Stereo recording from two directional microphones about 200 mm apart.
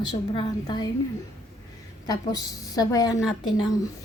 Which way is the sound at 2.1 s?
20° left (ahead or behind).